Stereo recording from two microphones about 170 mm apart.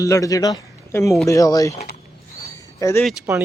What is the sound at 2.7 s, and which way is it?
Speech, 15° left (ahead or behind).